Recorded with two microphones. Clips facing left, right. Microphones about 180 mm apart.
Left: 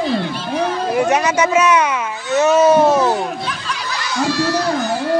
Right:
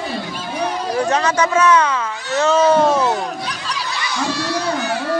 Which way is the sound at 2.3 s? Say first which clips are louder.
Left 2 dB; 20° left (ahead or behind).